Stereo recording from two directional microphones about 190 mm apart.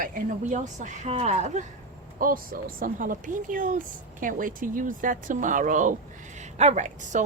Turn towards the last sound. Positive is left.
turn(degrees=-40)  # may be behind; listen again after turning